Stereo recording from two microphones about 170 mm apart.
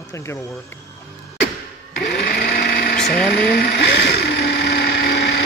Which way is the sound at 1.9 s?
70° left (ahead or behind).